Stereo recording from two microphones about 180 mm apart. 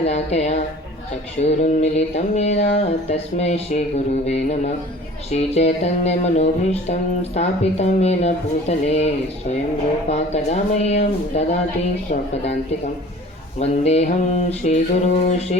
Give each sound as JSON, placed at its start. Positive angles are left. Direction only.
{"t": 0.0, "sound": "music", "side_deg": 35}
{"t": 13.6, "sound": "music", "side_deg": 35}